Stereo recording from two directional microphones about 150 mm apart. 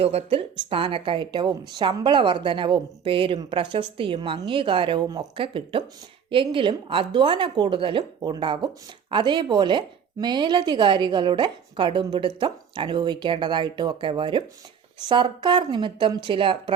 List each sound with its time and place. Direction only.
0.0 s speech: 45° right (ahead or behind)